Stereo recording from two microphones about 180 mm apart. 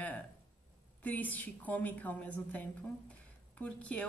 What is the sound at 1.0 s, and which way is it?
A woman's voice, 10° left (ahead or behind).